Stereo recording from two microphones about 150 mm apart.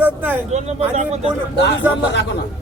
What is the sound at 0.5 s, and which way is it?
Speech, 45° right (ahead or behind).